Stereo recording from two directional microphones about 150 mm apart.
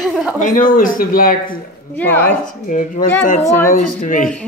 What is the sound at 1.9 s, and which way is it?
Speech, 10° left (ahead or behind).